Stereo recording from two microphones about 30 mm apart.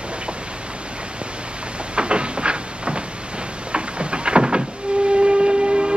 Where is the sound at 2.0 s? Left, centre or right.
Right.